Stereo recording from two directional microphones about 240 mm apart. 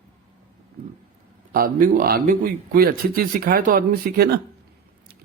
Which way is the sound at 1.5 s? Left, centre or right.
Right.